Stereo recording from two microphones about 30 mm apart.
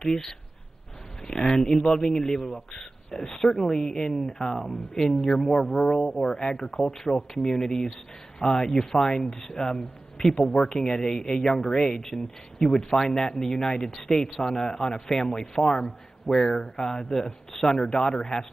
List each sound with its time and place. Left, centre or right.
0.0 s a man's voice: centre